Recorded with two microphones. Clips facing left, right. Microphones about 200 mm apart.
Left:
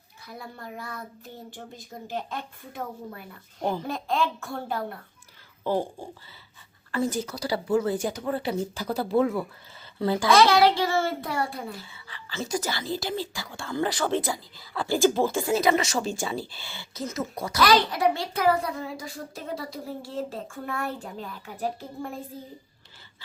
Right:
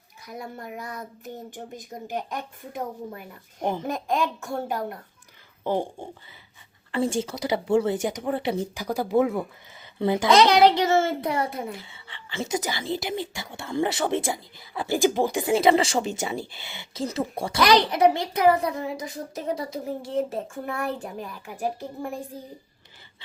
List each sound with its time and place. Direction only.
0.3 s a child's voice: 20° right (ahead or behind)
5.6 s a child's voice: 25° right (ahead or behind)
17.6 s a child's voice: 15° right (ahead or behind)